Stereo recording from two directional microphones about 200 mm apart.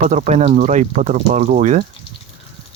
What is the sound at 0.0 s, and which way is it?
Speech, 35° right (ahead or behind).